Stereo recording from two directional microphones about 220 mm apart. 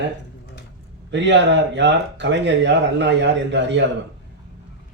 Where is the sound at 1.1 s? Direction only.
55° right (ahead or behind).